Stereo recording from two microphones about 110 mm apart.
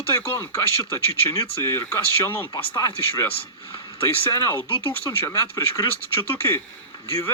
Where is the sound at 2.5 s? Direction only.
35° left (ahead or behind).